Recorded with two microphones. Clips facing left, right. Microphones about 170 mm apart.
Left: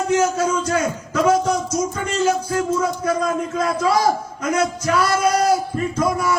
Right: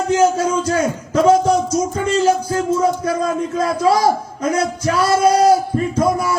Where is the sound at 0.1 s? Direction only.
30° right (ahead or behind).